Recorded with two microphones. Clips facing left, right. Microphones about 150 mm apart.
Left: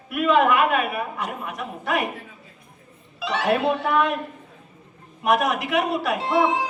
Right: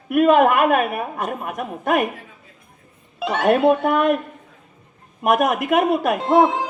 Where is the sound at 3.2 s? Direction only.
50° right (ahead or behind).